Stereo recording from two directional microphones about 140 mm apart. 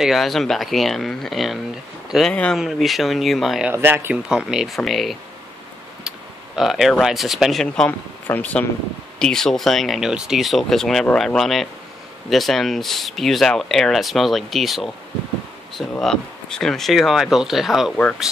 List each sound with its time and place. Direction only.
0.0 s speech: centre (ahead or behind)
3.7 s speech: 15° right (ahead or behind)
4.3 s speech: 5° right (ahead or behind)